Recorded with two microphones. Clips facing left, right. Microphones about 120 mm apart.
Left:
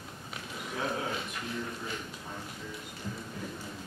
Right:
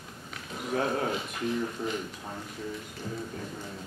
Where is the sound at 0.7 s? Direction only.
55° right (ahead or behind).